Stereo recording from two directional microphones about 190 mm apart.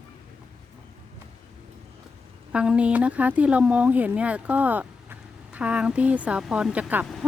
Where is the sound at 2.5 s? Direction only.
5° right (ahead or behind).